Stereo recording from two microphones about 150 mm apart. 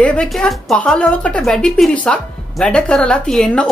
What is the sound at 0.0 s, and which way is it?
A woman's voice, 5° left (ahead or behind).